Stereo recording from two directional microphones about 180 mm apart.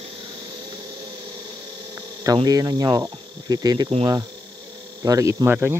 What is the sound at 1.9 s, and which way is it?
Cricket, 20° right (ahead or behind).